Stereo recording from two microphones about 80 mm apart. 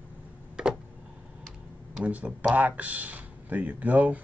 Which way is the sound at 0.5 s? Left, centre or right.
Centre.